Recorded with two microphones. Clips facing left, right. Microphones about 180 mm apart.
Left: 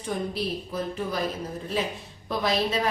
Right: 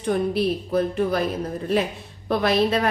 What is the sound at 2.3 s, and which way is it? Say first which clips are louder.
Speech: right 6 dB; 60° right (ahead or behind).